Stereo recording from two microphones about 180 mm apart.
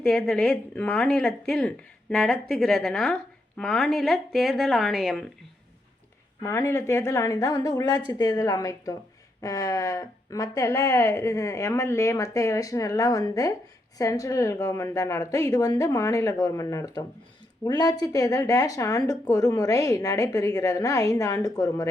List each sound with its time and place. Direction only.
0.0 s a woman's voice: 5° left (ahead or behind)
6.4 s speech: 15° left (ahead or behind)